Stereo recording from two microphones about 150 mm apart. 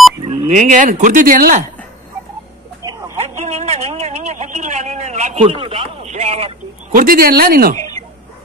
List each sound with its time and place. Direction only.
0.5 s speech: 55° right (ahead or behind)
3.2 s a man's voice: 45° right (ahead or behind)
6.9 s speech: 70° right (ahead or behind)